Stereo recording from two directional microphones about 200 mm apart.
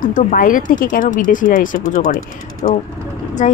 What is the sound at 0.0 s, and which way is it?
Speech, 45° left (ahead or behind).